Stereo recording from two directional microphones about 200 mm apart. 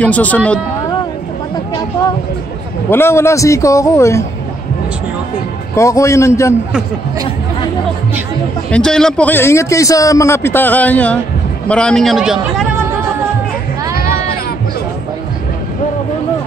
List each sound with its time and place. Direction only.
0.0 s a man's voice: 5° left (ahead or behind)
2.9 s a man's voice: 10° left (ahead or behind)
5.8 s a man's voice: 15° left (ahead or behind)
8.6 s a man's voice: 5° left (ahead or behind)